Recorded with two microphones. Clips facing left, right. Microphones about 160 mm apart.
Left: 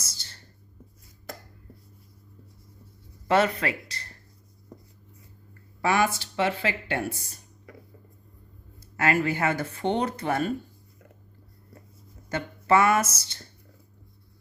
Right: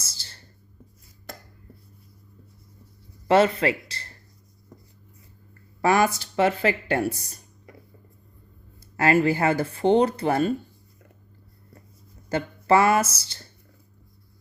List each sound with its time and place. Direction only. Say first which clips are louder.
0.0 s a sound: even; 30° right (ahead or behind)
3.2 s speech: right 4 dB; 30° right (ahead or behind)
5.8 s speech: right 4 dB; 40° right (ahead or behind)
9.0 s speech: right 4 dB; 30° right (ahead or behind)
12.3 s speech: right 2 dB; 30° right (ahead or behind)